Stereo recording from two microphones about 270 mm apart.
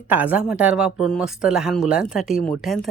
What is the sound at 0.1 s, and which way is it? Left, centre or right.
Speech, centre.